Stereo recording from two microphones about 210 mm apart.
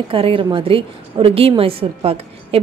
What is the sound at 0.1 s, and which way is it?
A woman's voice, 25° right (ahead or behind).